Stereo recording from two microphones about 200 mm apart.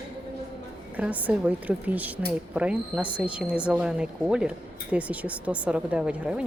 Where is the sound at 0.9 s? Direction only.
5° right (ahead or behind).